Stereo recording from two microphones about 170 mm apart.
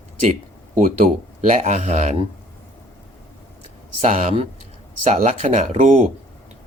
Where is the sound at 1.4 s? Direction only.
45° right (ahead or behind).